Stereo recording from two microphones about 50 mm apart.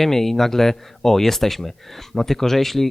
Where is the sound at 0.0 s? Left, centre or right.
Centre.